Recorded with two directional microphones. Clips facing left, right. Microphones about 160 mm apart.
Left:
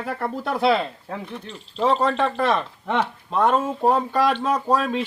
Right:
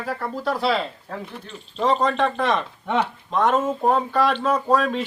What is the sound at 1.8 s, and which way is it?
Speech, 10° left (ahead or behind).